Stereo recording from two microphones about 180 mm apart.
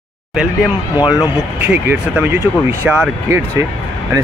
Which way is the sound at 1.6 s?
10° right (ahead or behind).